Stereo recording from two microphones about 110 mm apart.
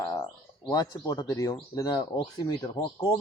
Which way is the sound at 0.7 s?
35° left (ahead or behind).